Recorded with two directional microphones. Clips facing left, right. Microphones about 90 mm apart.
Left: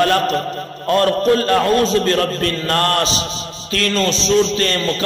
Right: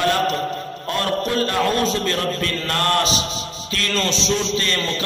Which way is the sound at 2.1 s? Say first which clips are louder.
Left 5 dB; 45° left (ahead or behind).